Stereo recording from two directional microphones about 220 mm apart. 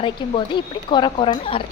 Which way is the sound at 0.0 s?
25° left (ahead or behind).